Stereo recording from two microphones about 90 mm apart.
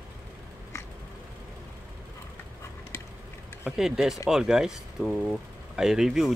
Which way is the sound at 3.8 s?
5° right (ahead or behind).